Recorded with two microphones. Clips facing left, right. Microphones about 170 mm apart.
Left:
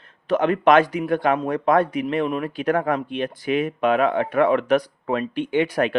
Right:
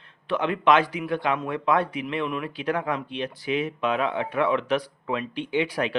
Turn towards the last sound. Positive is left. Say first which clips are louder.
# left 5 dB
turn(degrees=50)  # may be behind; listen again after turning